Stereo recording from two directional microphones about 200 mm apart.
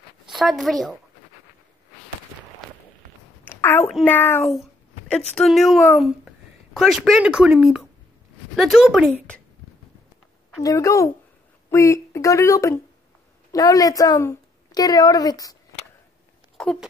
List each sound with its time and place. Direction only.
0.3 s a woman's voice: centre (ahead or behind)
3.9 s speech: 10° left (ahead or behind)
10.6 s a woman's voice: 15° left (ahead or behind)
16.6 s a sound: 5° left (ahead or behind)